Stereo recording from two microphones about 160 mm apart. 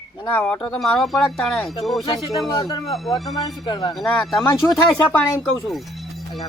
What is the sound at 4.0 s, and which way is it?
Speech, 5° left (ahead or behind).